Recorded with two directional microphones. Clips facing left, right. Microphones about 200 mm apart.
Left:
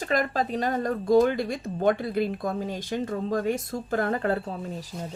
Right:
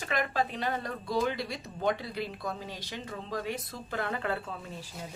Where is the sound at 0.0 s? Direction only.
40° left (ahead or behind).